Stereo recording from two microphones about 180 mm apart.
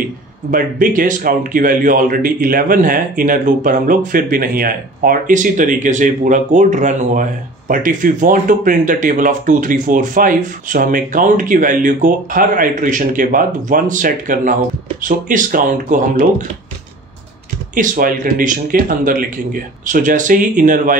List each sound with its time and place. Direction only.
0.5 s speech: 50° right (ahead or behind)
17.7 s speech: 50° right (ahead or behind)